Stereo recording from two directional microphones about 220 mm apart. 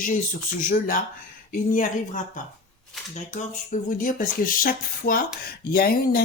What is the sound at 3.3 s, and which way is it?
Speech, 35° left (ahead or behind).